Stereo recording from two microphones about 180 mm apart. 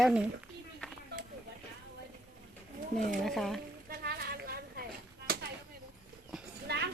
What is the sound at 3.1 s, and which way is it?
Speech, centre (ahead or behind).